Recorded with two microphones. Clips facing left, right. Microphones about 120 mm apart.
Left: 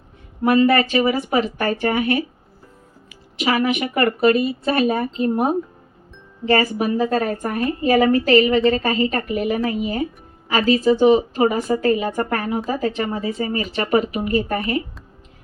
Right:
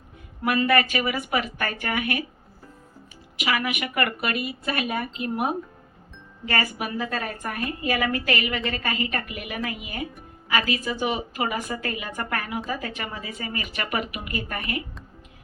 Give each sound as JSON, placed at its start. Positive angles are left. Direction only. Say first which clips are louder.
{"t": 0.4, "sound": "speech", "louder": "left 6 dB", "side_deg": 35}
{"t": 3.3, "sound": "speech", "louder": "left 7 dB", "side_deg": 35}